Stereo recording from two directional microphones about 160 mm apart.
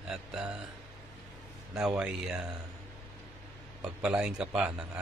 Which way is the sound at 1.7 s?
5° right (ahead or behind).